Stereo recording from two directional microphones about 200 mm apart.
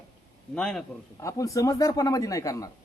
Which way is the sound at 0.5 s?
5° left (ahead or behind).